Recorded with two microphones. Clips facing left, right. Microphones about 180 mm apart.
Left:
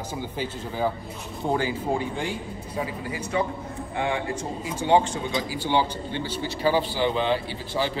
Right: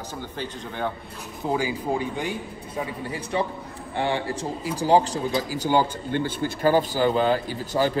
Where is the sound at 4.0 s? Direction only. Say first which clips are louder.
Right 2 dB; 30° right (ahead or behind).